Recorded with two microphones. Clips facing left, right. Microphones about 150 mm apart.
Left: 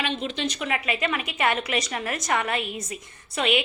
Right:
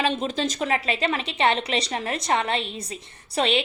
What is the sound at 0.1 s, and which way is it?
A woman's voice, 40° right (ahead or behind).